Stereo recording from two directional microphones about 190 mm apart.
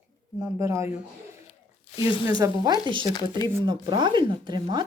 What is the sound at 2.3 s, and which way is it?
Speech, 20° right (ahead or behind).